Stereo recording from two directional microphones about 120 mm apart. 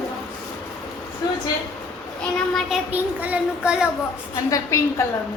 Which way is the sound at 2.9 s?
15° right (ahead or behind).